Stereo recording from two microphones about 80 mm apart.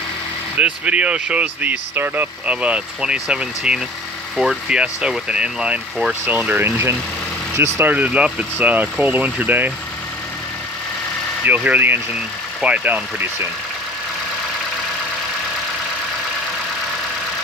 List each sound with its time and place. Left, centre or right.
0.5 s speech: centre
11.4 s speech: centre